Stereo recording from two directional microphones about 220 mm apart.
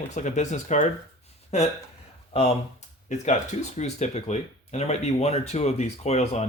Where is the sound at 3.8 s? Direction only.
30° left (ahead or behind).